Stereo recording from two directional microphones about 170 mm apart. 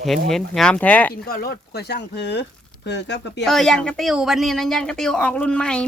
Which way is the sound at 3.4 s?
Centre (ahead or behind).